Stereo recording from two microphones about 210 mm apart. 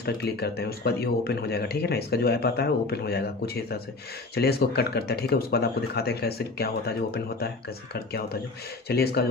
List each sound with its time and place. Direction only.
0.0 s speech: 50° left (ahead or behind)